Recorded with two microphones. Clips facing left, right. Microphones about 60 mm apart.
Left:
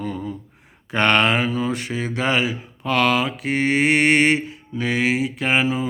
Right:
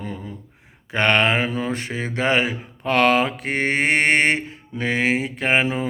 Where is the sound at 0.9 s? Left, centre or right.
Centre; by 5.7 s right.